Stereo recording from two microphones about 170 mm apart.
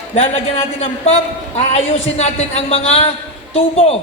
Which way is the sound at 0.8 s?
40° left (ahead or behind).